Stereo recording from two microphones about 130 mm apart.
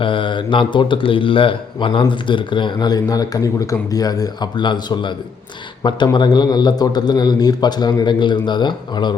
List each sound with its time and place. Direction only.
0.0 s speech: 40° left (ahead or behind)